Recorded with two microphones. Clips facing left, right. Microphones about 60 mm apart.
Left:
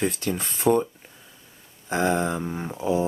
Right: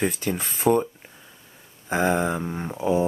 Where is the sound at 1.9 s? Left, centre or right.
Centre.